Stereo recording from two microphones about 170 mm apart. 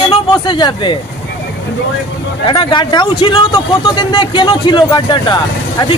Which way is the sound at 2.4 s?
30° left (ahead or behind).